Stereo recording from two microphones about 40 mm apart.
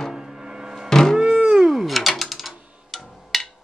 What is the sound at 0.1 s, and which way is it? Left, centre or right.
Music, centre.